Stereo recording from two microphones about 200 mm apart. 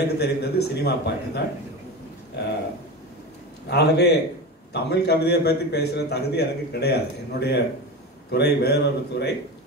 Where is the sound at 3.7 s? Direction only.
55° left (ahead or behind).